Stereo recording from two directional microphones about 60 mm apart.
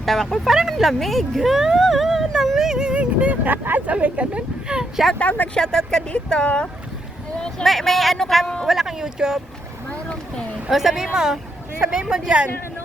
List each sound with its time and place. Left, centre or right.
0.0 s speech: centre
5.2 s speech: left
5.5 s speech: centre
7.6 s speech: centre
9.9 s boat: left
10.7 s speech: centre